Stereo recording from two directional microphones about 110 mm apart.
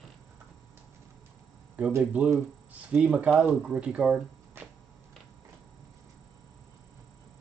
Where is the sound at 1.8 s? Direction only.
15° right (ahead or behind).